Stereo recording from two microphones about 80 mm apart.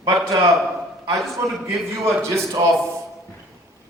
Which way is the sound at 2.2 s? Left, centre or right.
Right.